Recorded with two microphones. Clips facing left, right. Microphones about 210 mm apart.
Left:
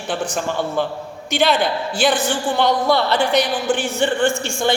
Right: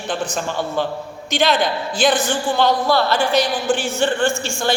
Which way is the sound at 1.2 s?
10° left (ahead or behind).